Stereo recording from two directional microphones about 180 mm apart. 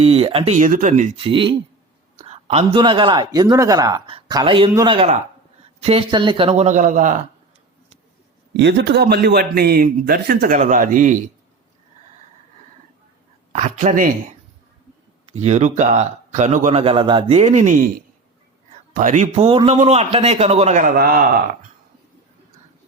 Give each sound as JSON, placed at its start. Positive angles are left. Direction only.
{"t": 0.0, "sound": "speech", "side_deg": -35}
{"t": 1.2, "sound": "speech", "side_deg": -30}
{"t": 4.7, "sound": "a man's voice", "side_deg": -20}
{"t": 5.8, "sound": "speech", "side_deg": -30}
{"t": 8.5, "sound": "a man's voice", "side_deg": -70}
{"t": 13.5, "sound": "a woman's voice", "side_deg": -45}
{"t": 15.3, "sound": "speech", "side_deg": -40}
{"t": 18.9, "sound": "speech", "side_deg": -45}